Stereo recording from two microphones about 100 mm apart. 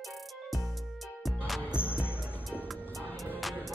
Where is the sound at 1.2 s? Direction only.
Centre (ahead or behind).